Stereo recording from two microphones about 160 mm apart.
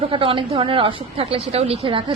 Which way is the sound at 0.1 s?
35° right (ahead or behind).